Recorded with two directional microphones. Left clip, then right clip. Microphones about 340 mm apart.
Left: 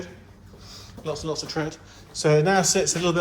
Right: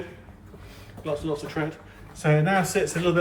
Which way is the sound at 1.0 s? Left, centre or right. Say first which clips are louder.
Even; centre.